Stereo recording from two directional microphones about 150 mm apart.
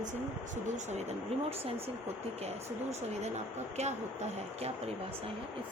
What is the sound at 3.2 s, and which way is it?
Speech, 50° right (ahead or behind).